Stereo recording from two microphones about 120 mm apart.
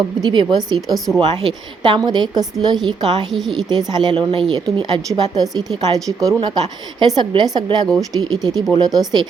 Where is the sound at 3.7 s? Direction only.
35° right (ahead or behind).